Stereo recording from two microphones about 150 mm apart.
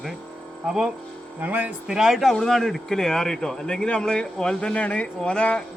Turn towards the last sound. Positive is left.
turn(degrees=10)  # may be behind; listen again after turning